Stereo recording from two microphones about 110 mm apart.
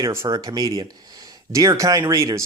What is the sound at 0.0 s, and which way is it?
Speech, 30° right (ahead or behind).